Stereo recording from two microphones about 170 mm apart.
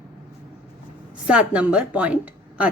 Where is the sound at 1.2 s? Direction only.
5° right (ahead or behind).